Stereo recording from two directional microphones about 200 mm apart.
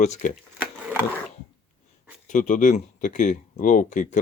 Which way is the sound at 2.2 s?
40° left (ahead or behind).